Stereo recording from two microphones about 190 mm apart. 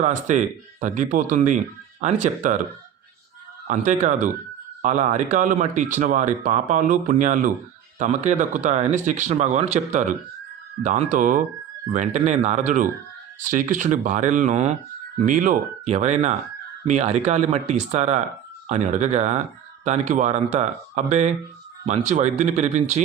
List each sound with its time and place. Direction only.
0.0 s speech: 40° right (ahead or behind)
3.7 s speech: 40° right (ahead or behind)